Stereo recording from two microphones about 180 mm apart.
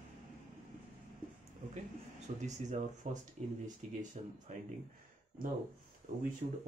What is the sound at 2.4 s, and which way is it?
Speech, 40° right (ahead or behind).